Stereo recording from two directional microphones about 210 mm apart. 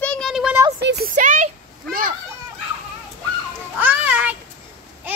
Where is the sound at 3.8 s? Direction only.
5° right (ahead or behind).